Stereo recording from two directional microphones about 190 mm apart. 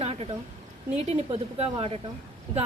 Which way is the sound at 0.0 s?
30° right (ahead or behind).